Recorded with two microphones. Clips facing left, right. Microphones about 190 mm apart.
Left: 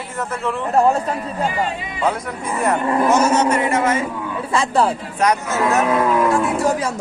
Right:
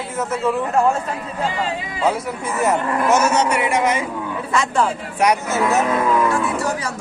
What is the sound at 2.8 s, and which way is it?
Speech, 25° left (ahead or behind).